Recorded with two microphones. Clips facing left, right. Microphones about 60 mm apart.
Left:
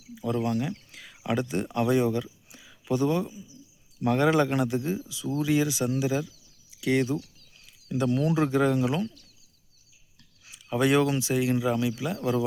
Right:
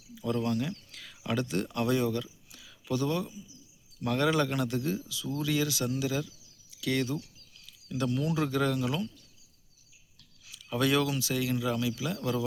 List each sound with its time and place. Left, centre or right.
0.1 s speech: left
10.4 s speech: left